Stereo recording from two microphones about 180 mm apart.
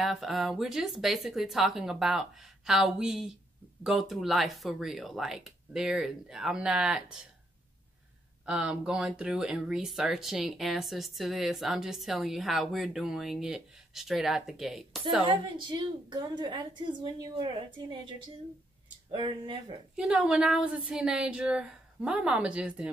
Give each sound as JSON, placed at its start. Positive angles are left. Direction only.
{"t": 0.0, "sound": "speech", "side_deg": 0}
{"t": 8.5, "sound": "speech", "side_deg": -5}
{"t": 15.2, "sound": "a woman's voice", "side_deg": -25}
{"t": 19.1, "sound": "a woman's voice", "side_deg": -25}
{"t": 20.0, "sound": "speech", "side_deg": -5}